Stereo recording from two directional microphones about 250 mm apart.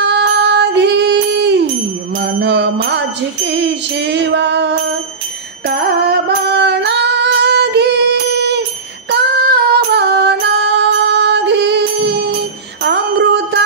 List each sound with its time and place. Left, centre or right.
0.0 s music: right
6.0 s singing: right
9.1 s music: right
12.8 s bicycle bell: right